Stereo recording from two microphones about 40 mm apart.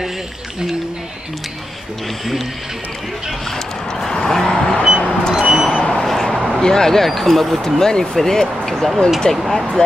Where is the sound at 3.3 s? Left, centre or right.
Centre.